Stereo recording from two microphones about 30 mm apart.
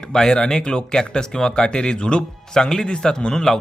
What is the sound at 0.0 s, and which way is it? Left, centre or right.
Speech, left.